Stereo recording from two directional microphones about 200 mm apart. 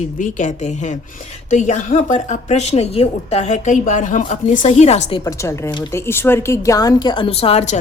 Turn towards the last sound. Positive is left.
turn(degrees=35)  # may be behind; listen again after turning